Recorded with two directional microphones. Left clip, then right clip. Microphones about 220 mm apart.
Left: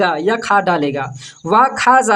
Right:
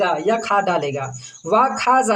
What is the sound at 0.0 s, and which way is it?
Speech, 35° left (ahead or behind).